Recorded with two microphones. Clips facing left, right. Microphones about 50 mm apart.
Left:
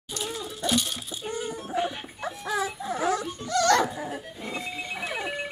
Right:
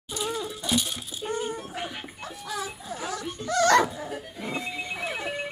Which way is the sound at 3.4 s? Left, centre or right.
Right.